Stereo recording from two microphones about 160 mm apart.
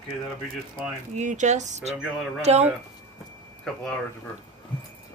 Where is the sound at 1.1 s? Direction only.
50° right (ahead or behind).